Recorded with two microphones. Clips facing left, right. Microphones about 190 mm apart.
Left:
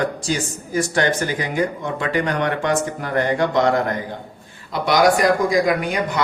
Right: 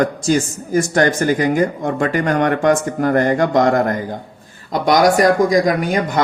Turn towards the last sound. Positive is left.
turn(degrees=-40)  # may be behind; listen again after turning